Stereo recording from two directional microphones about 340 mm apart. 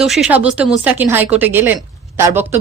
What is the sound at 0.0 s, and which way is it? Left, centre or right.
A woman's voice, centre.